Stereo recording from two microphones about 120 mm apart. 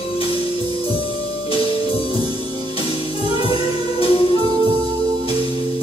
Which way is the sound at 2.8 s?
50° left (ahead or behind).